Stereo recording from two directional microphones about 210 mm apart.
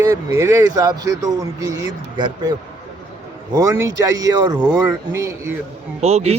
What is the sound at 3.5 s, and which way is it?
A man's voice, 15° right (ahead or behind).